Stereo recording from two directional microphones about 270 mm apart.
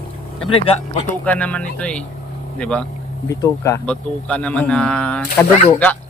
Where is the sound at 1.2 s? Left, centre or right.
Centre.